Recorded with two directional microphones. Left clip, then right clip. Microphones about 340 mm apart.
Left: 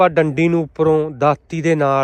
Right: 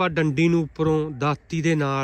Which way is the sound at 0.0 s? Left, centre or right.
Centre.